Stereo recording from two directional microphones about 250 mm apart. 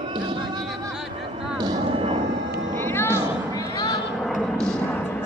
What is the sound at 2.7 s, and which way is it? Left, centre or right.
Music, centre.